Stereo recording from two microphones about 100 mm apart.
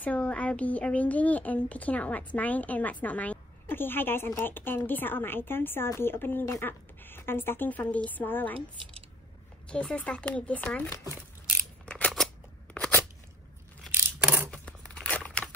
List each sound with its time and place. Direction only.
0.0 s speech: 15° left (ahead or behind)
9.7 s speech: 10° left (ahead or behind)
11.8 s a sound: 15° left (ahead or behind)
14.5 s tearing: 10° left (ahead or behind)